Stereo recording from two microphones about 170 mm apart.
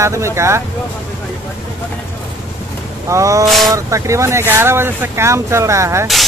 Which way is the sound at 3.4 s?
Centre (ahead or behind).